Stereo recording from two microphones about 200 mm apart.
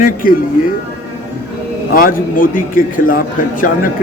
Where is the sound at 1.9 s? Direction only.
45° left (ahead or behind).